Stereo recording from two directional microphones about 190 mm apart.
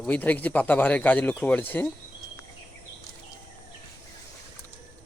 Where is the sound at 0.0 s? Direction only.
10° left (ahead or behind).